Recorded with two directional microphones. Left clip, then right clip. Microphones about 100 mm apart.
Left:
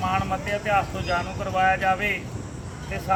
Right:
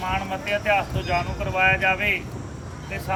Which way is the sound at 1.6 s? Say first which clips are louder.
Right 1 dB; 10° left (ahead or behind).